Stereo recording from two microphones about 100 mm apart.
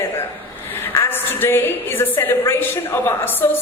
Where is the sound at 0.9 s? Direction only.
20° left (ahead or behind).